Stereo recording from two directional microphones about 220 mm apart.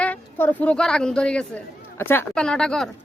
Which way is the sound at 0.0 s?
10° left (ahead or behind).